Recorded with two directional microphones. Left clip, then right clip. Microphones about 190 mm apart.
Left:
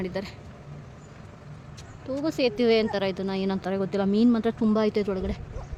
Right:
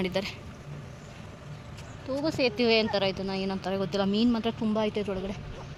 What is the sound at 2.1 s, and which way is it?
Speech, 30° left (ahead or behind).